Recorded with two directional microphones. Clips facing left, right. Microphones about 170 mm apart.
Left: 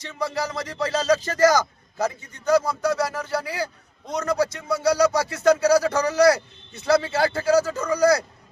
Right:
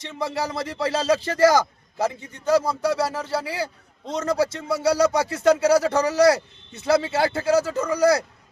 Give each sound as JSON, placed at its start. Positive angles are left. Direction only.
{"t": 0.2, "sound": "a man's voice", "side_deg": -25}